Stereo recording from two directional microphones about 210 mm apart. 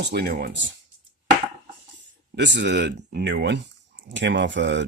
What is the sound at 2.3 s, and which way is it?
Speech, 55° right (ahead or behind).